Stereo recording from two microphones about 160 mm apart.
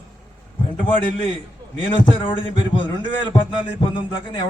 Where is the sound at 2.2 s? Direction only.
30° left (ahead or behind).